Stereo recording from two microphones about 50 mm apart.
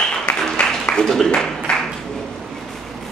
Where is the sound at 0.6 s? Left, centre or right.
Centre.